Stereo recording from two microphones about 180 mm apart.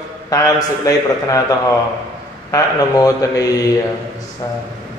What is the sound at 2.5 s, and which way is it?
Speech, 20° left (ahead or behind).